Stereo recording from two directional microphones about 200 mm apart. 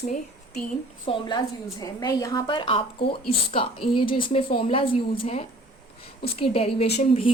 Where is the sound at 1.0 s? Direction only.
25° left (ahead or behind).